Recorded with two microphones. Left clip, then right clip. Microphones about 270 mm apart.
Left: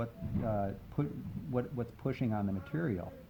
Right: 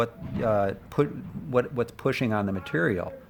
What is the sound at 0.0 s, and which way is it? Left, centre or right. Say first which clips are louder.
Speech: right 12 dB; right.